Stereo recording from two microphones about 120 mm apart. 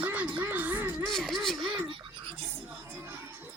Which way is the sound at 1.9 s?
45° right (ahead or behind).